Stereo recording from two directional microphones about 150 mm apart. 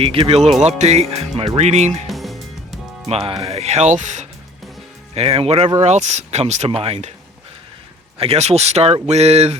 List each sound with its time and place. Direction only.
0.0 s speech: 40° right (ahead or behind)
2.0 s music: centre (ahead or behind)
3.1 s speech: 40° right (ahead or behind)
5.1 s speech: 40° right (ahead or behind)
8.2 s speech: 45° right (ahead or behind)